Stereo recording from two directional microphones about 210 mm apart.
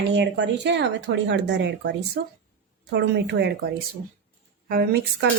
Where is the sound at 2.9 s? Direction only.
55° right (ahead or behind).